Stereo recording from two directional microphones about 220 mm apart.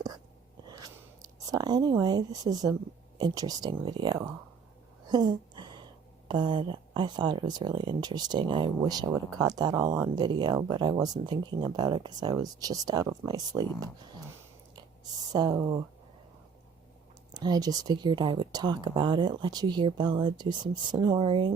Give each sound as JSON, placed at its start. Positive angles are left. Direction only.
{"t": 0.7, "sound": "a sound", "side_deg": -15}
{"t": 3.2, "sound": "speech", "side_deg": -20}
{"t": 5.0, "sound": "a sound", "side_deg": -20}
{"t": 6.2, "sound": "speech", "side_deg": -20}
{"t": 15.3, "sound": "speech", "side_deg": -20}
{"t": 17.3, "sound": "speech", "side_deg": -20}